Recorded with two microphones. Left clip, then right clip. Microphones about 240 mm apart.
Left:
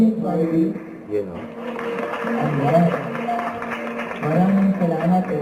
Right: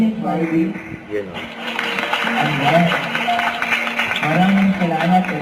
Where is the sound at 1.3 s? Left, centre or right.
Centre.